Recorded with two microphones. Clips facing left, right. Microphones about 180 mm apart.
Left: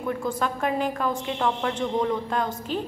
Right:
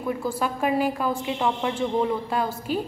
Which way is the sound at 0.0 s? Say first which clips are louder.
Even; 5° right (ahead or behind).